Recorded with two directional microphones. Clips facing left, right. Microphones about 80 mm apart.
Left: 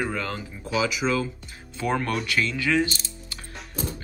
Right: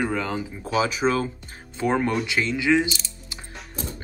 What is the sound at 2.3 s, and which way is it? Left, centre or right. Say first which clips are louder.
Mechanisms: right 3 dB; right.